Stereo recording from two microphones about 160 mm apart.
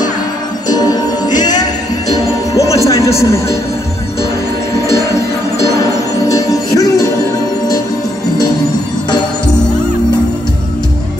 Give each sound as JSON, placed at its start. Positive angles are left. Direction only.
{"t": 0.7, "sound": "music", "side_deg": 25}
{"t": 5.8, "sound": "music", "side_deg": 20}